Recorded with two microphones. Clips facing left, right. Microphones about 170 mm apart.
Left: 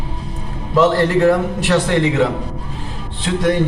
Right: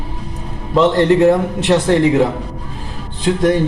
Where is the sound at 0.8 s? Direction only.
20° right (ahead or behind).